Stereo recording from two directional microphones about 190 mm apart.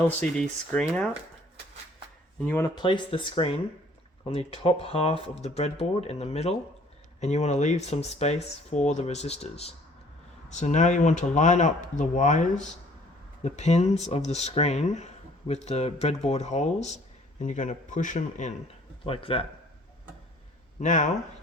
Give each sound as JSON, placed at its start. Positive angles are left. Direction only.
{"t": 0.2, "sound": "speech", "side_deg": 5}
{"t": 2.4, "sound": "speech", "side_deg": 10}
{"t": 2.6, "sound": "speech", "side_deg": 25}
{"t": 19.0, "sound": "speech", "side_deg": 30}
{"t": 20.8, "sound": "speech", "side_deg": 40}